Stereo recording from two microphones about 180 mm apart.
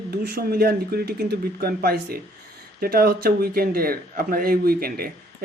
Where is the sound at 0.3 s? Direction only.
60° right (ahead or behind).